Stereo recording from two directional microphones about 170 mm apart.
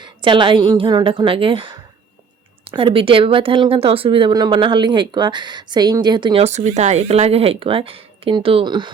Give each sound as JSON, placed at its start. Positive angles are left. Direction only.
{"t": 0.0, "sound": "speech", "side_deg": -30}
{"t": 6.4, "sound": "speech", "side_deg": -40}